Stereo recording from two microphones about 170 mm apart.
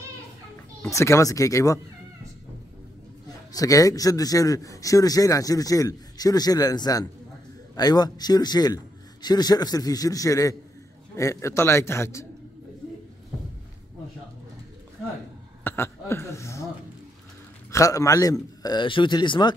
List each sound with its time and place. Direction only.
0.8 s a man's voice: 15° left (ahead or behind)
3.5 s a man's voice: 20° left (ahead or behind)
15.6 s speech: 15° left (ahead or behind)
17.6 s a man's voice: 20° left (ahead or behind)